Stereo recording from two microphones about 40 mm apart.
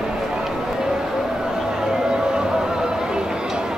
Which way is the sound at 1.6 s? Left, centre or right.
Centre.